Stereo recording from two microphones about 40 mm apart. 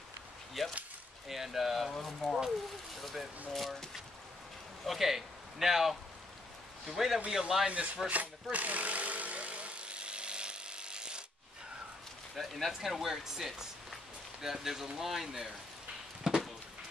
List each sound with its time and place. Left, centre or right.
0.6 s speech: centre
4.8 s speech: centre
7.6 s speech: right
8.1 s a sound: right
12.4 s speech: centre
16.3 s a sound: centre